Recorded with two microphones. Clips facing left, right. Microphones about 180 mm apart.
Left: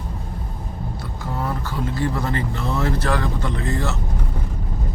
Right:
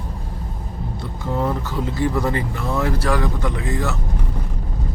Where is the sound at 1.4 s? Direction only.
15° right (ahead or behind).